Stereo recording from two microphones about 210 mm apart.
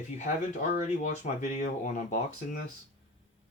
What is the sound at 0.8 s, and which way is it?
Speech, 35° left (ahead or behind).